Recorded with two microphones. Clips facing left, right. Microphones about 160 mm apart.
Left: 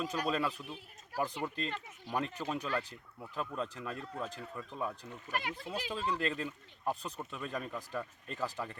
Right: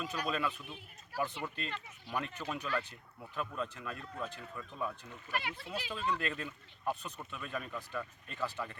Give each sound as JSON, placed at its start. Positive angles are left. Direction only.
{"t": 0.0, "sound": "speech", "side_deg": 35}
{"t": 5.3, "sound": "speech", "side_deg": 40}